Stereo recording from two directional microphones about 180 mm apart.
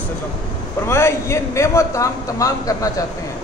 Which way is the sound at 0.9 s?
15° left (ahead or behind).